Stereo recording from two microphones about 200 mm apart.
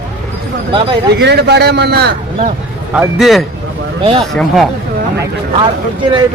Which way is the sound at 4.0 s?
25° right (ahead or behind).